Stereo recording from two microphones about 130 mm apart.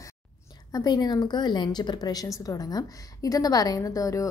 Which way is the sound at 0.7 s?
30° left (ahead or behind).